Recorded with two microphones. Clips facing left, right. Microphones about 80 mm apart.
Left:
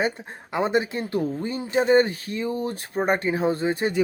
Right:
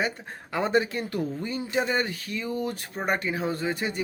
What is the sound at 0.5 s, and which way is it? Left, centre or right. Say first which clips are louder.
Speech: left 2 dB; left.